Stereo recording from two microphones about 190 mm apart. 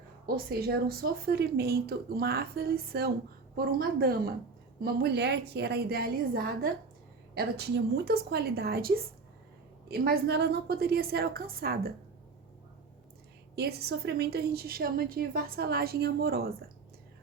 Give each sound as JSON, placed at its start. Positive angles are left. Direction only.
{"t": 0.3, "sound": "a woman's voice", "side_deg": -55}
{"t": 9.9, "sound": "a woman's voice", "side_deg": -55}
{"t": 13.6, "sound": "a woman's voice", "side_deg": -55}